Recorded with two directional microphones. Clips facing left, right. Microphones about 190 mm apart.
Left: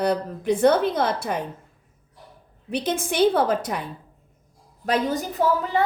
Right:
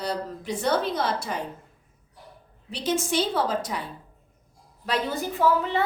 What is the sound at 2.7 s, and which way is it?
A woman's voice, 55° left (ahead or behind).